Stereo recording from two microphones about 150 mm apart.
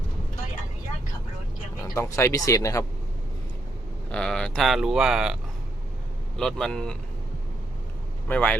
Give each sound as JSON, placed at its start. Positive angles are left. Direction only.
{"t": 1.8, "sound": "speech", "side_deg": 20}
{"t": 4.1, "sound": "speech", "side_deg": 5}
{"t": 8.3, "sound": "speech", "side_deg": 10}